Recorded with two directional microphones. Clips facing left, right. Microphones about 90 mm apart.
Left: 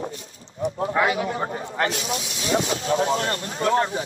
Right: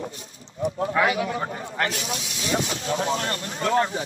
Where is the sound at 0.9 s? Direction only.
25° left (ahead or behind).